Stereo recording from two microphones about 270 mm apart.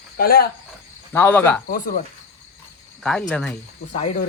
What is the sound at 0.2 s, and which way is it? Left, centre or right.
Speech, left.